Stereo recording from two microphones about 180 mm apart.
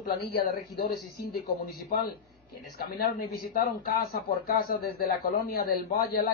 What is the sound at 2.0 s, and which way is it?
A man's voice, 60° left (ahead or behind).